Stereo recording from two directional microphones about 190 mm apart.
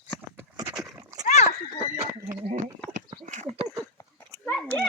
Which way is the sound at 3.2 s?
40° right (ahead or behind).